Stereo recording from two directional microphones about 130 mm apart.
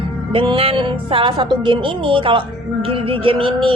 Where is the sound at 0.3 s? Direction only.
45° right (ahead or behind).